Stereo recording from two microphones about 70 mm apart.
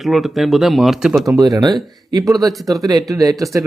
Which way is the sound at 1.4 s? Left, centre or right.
Right.